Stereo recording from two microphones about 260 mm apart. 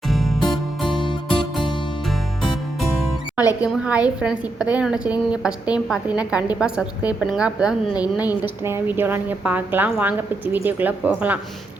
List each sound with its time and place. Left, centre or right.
0.1 s music: centre
0.9 s music: centre
1.5 s music: centre
3.6 s a woman's voice: centre